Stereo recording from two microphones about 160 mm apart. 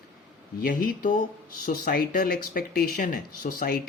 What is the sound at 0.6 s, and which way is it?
Speech, 60° left (ahead or behind).